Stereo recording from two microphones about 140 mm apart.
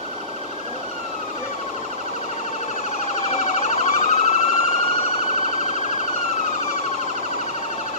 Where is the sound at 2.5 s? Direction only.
55° left (ahead or behind).